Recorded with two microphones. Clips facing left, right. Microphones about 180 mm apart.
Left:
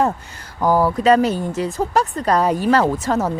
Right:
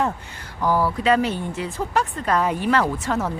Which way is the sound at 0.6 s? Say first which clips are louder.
Left 5 dB; 45° left (ahead or behind).